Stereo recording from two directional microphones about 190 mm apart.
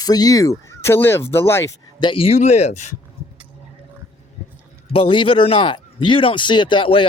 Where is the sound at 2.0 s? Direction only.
30° left (ahead or behind).